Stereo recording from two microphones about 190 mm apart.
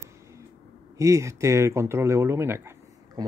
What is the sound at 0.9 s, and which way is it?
Speech, 15° right (ahead or behind).